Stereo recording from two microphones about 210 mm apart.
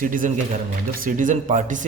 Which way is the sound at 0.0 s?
40° right (ahead or behind).